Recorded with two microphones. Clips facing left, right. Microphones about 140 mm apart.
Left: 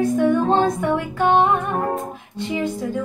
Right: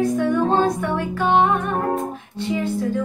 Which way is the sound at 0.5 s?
15° left (ahead or behind).